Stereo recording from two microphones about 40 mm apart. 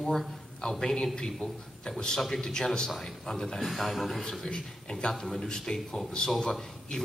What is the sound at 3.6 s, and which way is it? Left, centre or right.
Speech, centre.